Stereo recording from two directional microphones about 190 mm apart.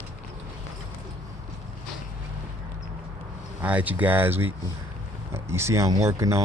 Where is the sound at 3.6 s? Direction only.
10° right (ahead or behind).